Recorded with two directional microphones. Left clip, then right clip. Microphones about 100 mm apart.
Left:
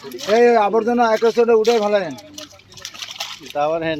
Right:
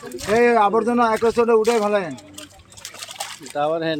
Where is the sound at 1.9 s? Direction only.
15° left (ahead or behind).